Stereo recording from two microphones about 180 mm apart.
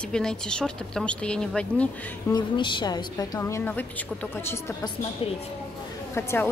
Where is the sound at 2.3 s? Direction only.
25° left (ahead or behind).